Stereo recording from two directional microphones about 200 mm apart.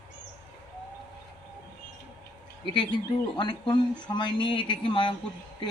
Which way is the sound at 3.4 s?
20° left (ahead or behind).